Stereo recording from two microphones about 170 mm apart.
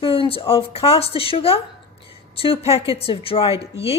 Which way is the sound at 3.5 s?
15° right (ahead or behind).